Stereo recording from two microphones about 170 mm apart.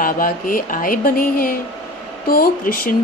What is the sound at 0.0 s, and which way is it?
Speech, 55° left (ahead or behind).